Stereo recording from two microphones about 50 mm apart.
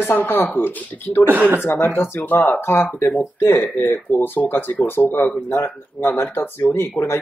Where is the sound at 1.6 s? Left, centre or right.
Left.